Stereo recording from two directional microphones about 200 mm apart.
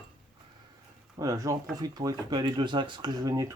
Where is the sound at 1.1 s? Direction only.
15° right (ahead or behind).